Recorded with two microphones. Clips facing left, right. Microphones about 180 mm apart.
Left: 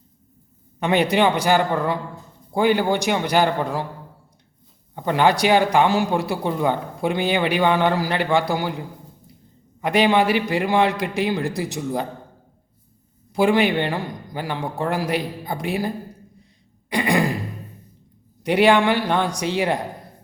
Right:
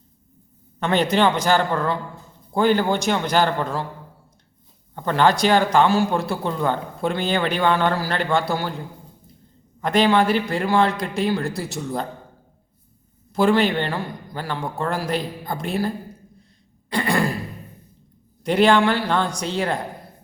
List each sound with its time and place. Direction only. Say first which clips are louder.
0.8 s a man's voice: left 1 dB; 15° left (ahead or behind)
4.9 s speech: even; 15° left (ahead or behind)
9.8 s speech: even; 15° left (ahead or behind)
13.3 s speech: even; 15° left (ahead or behind)
16.9 s speech: left 1 dB; 15° left (ahead or behind)
18.4 s speech: even; 15° left (ahead or behind)